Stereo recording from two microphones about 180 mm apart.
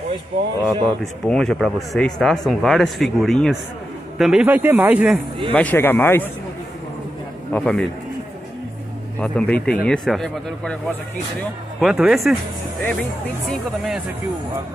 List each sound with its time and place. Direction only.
0.6 s speech: 25° right (ahead or behind)
1.2 s speech: 5° left (ahead or behind)
5.5 s speech: 10° left (ahead or behind)
7.5 s speech: 5° left (ahead or behind)
9.2 s speech: 5° left (ahead or behind)
11.8 s speech: 5° right (ahead or behind)
13.5 s speech: centre (ahead or behind)